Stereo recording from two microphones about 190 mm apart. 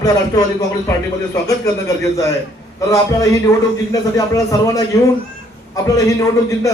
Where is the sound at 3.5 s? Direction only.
15° left (ahead or behind).